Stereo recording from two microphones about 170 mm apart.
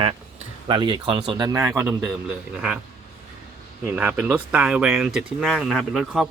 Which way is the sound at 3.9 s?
10° right (ahead or behind).